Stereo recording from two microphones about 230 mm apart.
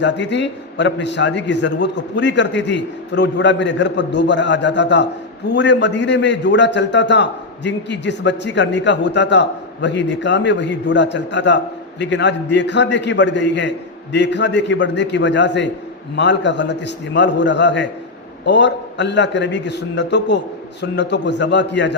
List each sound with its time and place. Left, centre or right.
0.0 s a man's voice: left